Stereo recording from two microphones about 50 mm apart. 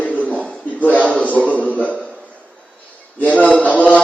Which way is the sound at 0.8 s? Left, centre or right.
Left.